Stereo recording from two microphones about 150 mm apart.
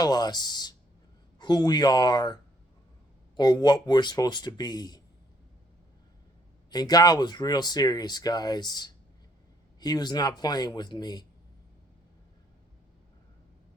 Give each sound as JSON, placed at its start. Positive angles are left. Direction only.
{"t": 0.0, "sound": "speech", "side_deg": 25}
{"t": 6.7, "sound": "speech", "side_deg": 30}